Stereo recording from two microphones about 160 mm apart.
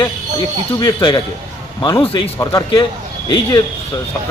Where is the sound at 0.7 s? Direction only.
30° left (ahead or behind).